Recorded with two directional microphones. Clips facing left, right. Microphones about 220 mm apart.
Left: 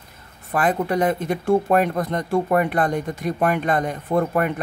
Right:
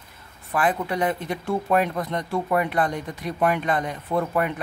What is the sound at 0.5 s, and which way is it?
Speech, 40° left (ahead or behind).